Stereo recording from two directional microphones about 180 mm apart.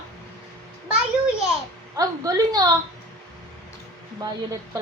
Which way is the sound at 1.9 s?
20° right (ahead or behind).